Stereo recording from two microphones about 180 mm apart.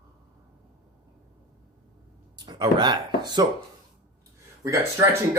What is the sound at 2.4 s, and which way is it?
Speech, 25° right (ahead or behind).